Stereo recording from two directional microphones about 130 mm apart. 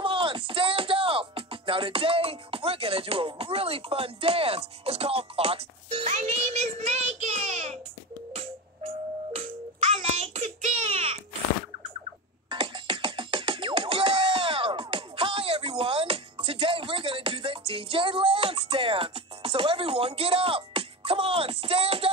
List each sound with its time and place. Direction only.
0.0 s speech: 40° right (ahead or behind)
6.1 s child singing: 55° right (ahead or behind)
8.4 s music: 50° right (ahead or behind)
12.4 s music: 40° right (ahead or behind)